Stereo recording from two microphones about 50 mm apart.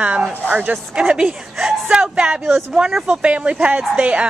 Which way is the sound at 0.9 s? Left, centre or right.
Right.